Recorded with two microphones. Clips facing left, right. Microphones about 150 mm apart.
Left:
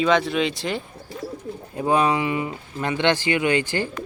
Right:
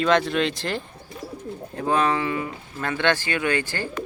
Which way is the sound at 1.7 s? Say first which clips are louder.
Left 2 dB; 15° left (ahead or behind).